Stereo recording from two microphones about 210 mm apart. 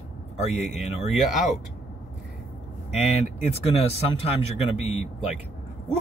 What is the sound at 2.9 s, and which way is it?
Speech, 30° left (ahead or behind).